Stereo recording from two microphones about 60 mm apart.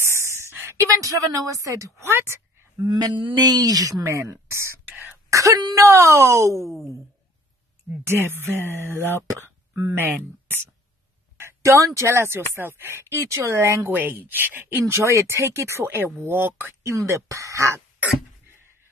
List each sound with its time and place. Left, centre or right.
0.0 s a sound: right
0.9 s speech: right
2.1 s speech: right
2.8 s speech: right
4.0 s speech: right
5.3 s speech: right
8.1 s speech: right
10.0 s speech: right
11.6 s speech: right
13.8 s speech: right
15.0 s speech: right
16.8 s speech: right